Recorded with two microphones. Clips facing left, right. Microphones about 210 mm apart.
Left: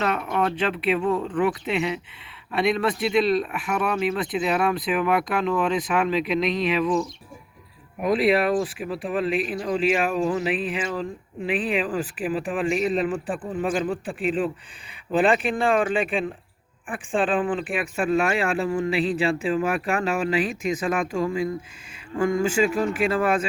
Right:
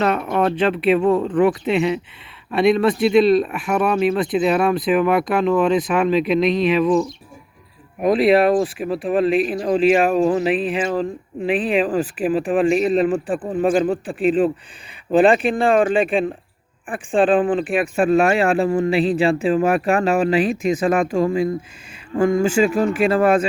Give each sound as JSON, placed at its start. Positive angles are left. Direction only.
{"t": 0.0, "sound": "speech", "side_deg": -35}
{"t": 8.0, "sound": "speech", "side_deg": -30}
{"t": 13.4, "sound": "speech", "side_deg": -40}
{"t": 22.1, "sound": "speech", "side_deg": -45}
{"t": 22.4, "sound": "speech", "side_deg": -30}